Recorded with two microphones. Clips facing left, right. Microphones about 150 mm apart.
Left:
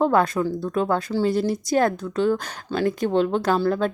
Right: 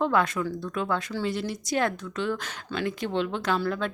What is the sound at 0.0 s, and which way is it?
Speech, 40° left (ahead or behind).